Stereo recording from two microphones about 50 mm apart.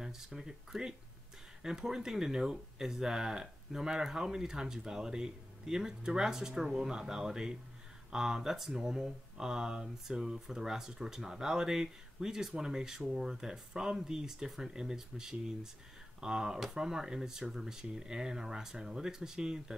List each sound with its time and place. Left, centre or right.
0.0 s speech: centre